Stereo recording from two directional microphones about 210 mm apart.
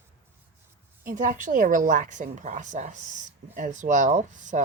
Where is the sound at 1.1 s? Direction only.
40° right (ahead or behind).